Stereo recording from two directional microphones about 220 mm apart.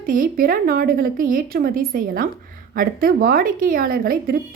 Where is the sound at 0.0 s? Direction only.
40° right (ahead or behind).